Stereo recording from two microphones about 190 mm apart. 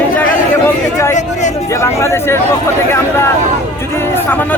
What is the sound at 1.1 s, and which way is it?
Speech, 40° left (ahead or behind).